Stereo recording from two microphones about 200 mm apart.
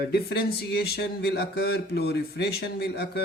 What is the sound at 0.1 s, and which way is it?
Speech, 55° left (ahead or behind).